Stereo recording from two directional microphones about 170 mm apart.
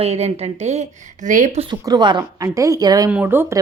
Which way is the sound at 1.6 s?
25° right (ahead or behind).